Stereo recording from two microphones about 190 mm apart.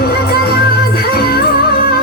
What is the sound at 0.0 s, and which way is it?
Music, 55° left (ahead or behind).